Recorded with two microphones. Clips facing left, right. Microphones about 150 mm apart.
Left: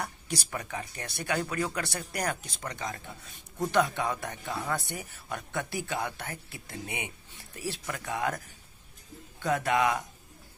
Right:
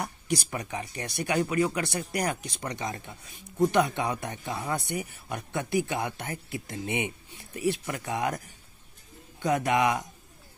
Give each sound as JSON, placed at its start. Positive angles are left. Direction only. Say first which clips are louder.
{"t": 0.5, "sound": "speech", "louder": "right 2 dB", "side_deg": -15}
{"t": 9.4, "sound": "speech", "louder": "right 2 dB", "side_deg": -15}